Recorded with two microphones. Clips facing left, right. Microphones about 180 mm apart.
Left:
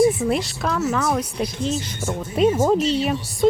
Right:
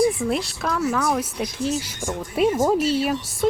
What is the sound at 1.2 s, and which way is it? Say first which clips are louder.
Speech: left 1 dB; 10° right (ahead or behind).